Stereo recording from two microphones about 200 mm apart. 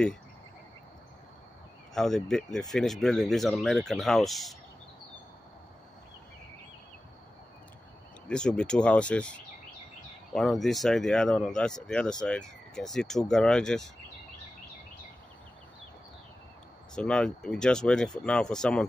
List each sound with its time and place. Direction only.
2.0 s speech: centre (ahead or behind)
8.3 s speech: 5° left (ahead or behind)
16.9 s speech: 5° left (ahead or behind)